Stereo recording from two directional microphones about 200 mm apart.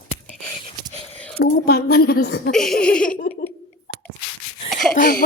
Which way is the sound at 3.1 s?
45° left (ahead or behind).